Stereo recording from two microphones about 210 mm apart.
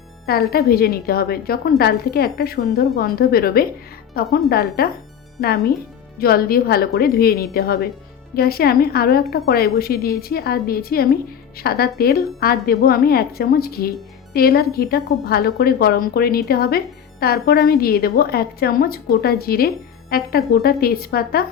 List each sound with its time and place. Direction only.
0.3 s speech: 45° left (ahead or behind)